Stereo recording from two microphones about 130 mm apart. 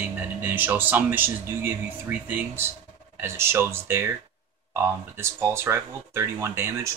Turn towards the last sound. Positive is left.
turn(degrees=-20)  # may be behind; listen again after turning